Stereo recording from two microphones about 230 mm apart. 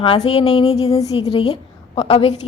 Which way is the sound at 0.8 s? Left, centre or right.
Centre.